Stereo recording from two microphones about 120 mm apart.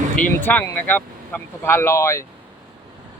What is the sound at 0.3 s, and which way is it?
Speech, 15° left (ahead or behind).